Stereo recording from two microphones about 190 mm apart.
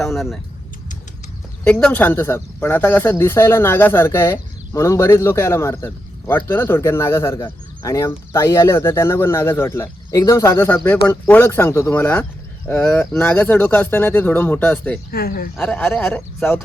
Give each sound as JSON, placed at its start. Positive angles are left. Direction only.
{"t": 0.0, "sound": "speech", "side_deg": 0}
{"t": 1.6, "sound": "speech", "side_deg": 5}
{"t": 15.1, "sound": "speech", "side_deg": 50}
{"t": 15.5, "sound": "speech", "side_deg": 5}